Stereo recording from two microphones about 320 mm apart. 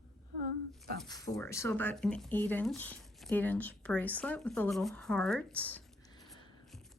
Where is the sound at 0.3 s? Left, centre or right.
Right.